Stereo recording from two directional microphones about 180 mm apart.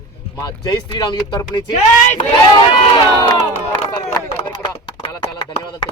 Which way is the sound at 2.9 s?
25° left (ahead or behind).